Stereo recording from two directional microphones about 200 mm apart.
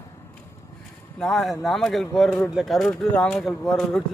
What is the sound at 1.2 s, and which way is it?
Speech, centre (ahead or behind).